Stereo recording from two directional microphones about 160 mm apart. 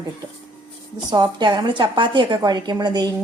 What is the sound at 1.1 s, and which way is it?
A woman's voice, 25° right (ahead or behind).